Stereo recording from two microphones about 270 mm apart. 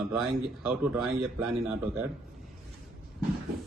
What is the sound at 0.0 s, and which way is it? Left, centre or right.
Speech, centre.